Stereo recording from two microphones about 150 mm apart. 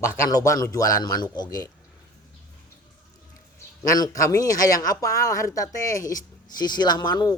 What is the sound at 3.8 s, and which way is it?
Speech, 25° left (ahead or behind).